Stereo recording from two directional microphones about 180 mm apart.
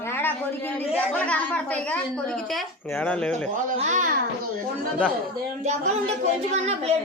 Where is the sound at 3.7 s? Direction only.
45° right (ahead or behind).